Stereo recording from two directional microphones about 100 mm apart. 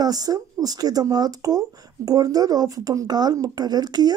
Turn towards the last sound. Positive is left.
turn(degrees=-40)  # may be behind; listen again after turning